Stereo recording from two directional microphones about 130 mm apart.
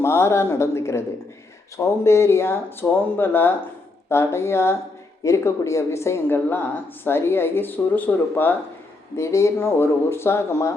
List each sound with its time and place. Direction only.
0.0 s a woman's voice: 20° left (ahead or behind)